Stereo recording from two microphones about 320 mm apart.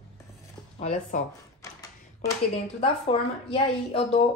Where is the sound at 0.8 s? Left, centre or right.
Left.